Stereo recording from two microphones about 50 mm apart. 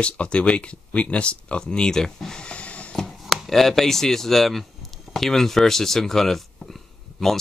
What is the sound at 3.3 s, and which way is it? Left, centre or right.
Speech, centre.